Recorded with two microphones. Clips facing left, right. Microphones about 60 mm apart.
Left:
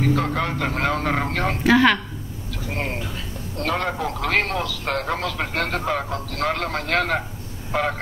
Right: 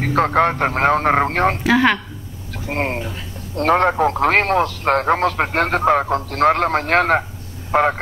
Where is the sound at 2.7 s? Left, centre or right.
Right.